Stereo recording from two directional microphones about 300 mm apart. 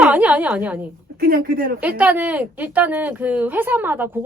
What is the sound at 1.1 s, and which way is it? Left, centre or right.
Speech, right.